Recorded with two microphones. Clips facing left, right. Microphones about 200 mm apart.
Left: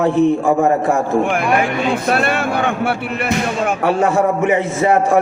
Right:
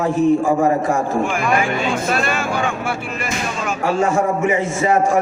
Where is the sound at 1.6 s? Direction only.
60° left (ahead or behind).